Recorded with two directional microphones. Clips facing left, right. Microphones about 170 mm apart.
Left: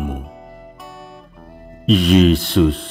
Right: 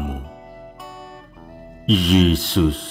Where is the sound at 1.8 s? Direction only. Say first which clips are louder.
Left 3 dB; 60° left (ahead or behind).